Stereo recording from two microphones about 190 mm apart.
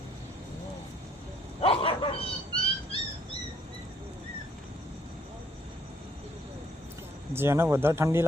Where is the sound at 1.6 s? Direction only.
30° left (ahead or behind).